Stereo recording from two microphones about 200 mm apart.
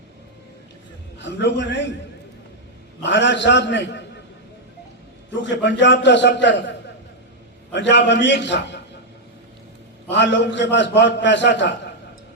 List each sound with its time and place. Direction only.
1.2 s a man's voice: 60° left (ahead or behind)
3.0 s a man's voice: 65° left (ahead or behind)
5.3 s a man's voice: 60° left (ahead or behind)
10.1 s a man's voice: 60° left (ahead or behind)